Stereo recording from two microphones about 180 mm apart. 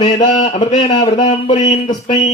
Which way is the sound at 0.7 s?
30° left (ahead or behind).